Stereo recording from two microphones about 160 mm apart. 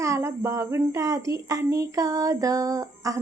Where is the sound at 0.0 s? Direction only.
20° right (ahead or behind).